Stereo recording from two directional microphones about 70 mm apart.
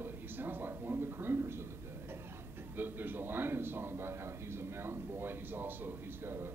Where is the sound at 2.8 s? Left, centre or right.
Right.